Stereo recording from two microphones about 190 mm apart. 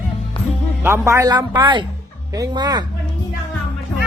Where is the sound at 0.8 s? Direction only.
15° right (ahead or behind).